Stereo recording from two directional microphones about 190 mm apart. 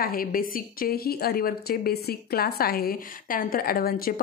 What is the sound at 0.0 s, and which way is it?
A woman's voice, 50° left (ahead or behind).